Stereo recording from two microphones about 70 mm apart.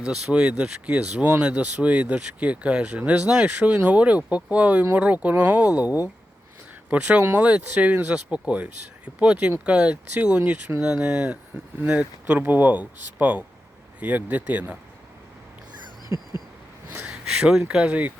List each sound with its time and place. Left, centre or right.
0.0 s speech: centre
16.0 s a sound: left
17.1 s speech: centre